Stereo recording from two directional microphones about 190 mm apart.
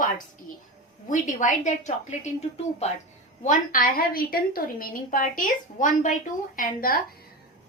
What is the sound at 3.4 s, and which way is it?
A woman's voice, 45° left (ahead or behind).